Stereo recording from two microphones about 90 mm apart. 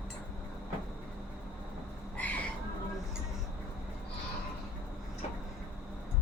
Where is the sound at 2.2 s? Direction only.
20° left (ahead or behind).